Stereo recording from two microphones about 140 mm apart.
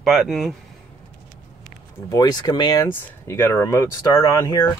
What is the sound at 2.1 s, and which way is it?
Speech, 30° left (ahead or behind).